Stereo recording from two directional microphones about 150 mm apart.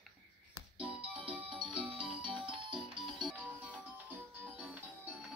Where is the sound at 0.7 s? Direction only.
35° right (ahead or behind).